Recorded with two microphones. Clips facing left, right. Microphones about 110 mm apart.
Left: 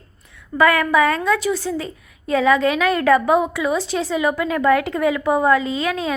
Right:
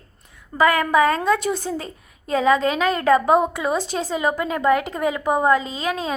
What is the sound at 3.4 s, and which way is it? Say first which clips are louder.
A woman's voice: left 1 dB; 45° right (ahead or behind).